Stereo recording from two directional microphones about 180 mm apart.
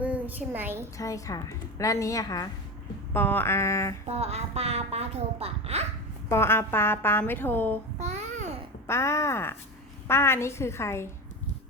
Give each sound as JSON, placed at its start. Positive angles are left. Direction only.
{"t": 0.0, "sound": "a woman's voice", "side_deg": -10}
{"t": 0.9, "sound": "a woman's voice", "side_deg": 20}
{"t": 4.0, "sound": "a woman's voice", "side_deg": -35}
{"t": 6.2, "sound": "a woman's voice", "side_deg": 15}
{"t": 7.9, "sound": "babbling", "side_deg": -40}
{"t": 8.9, "sound": "a woman's voice", "side_deg": 15}